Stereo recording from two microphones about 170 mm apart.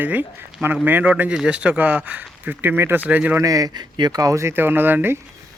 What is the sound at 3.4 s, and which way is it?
Speech, 20° right (ahead or behind).